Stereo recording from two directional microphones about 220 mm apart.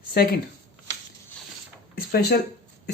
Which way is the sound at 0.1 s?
45° left (ahead or behind).